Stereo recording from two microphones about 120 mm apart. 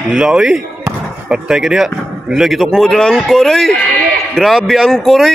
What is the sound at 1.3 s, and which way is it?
Speech, 5° right (ahead or behind).